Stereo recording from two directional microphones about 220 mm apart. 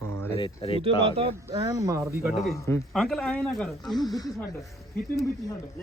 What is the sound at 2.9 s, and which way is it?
Speech, centre (ahead or behind).